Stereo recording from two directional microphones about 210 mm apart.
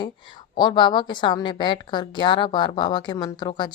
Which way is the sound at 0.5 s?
20° left (ahead or behind).